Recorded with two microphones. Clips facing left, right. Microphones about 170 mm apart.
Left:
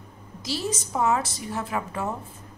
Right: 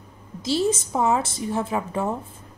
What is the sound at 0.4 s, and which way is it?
A woman's voice, 25° right (ahead or behind).